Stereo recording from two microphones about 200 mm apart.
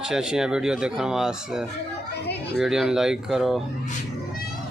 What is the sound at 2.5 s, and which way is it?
Speech, centre (ahead or behind).